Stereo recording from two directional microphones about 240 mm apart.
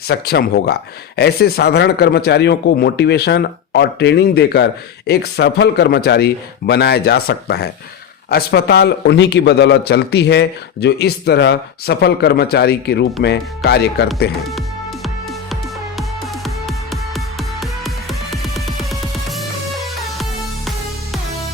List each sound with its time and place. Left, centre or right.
0.1 s speech: left
16.0 s music: centre